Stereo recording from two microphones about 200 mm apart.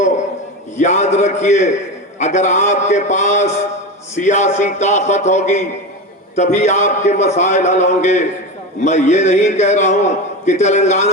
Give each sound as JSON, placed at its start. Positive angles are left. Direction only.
{"t": 0.8, "sound": "a man's voice", "side_deg": 35}